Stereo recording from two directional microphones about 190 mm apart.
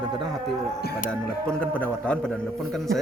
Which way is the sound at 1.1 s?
5° left (ahead or behind).